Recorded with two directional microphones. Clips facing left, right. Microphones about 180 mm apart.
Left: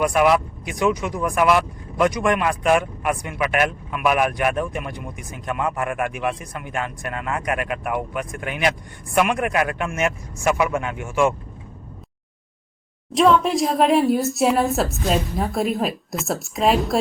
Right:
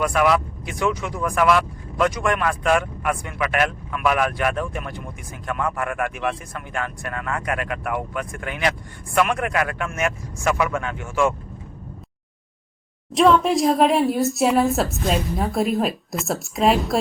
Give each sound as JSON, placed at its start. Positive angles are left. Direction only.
{"t": 0.0, "sound": "speech", "side_deg": 20}
{"t": 13.1, "sound": "a woman's voice", "side_deg": 0}